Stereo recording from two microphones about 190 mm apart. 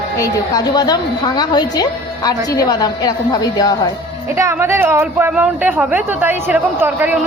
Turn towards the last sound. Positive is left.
turn(degrees=-10)  # may be behind; listen again after turning